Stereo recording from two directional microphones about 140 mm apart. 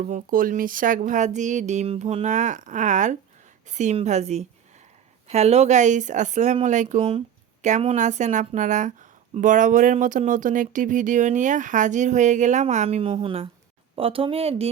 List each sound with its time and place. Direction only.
0.0 s a woman's voice: 70° right (ahead or behind); by 14.7 s 45° right (ahead or behind)